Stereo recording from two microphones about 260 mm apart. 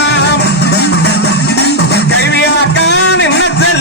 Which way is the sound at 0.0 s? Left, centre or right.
Left.